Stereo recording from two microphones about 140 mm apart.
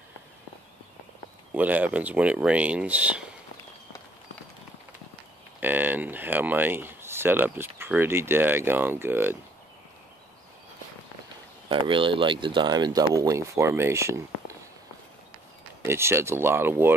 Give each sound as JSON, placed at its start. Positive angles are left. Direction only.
{"t": 1.5, "sound": "speech", "side_deg": -10}
{"t": 5.6, "sound": "speech", "side_deg": -15}
{"t": 11.7, "sound": "speech", "side_deg": -35}
{"t": 15.8, "sound": "speech", "side_deg": -20}